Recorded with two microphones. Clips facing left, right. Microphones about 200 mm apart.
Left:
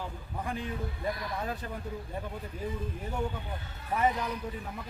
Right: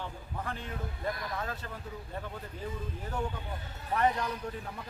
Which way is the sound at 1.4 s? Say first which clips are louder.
Left 3 dB; 15° left (ahead or behind).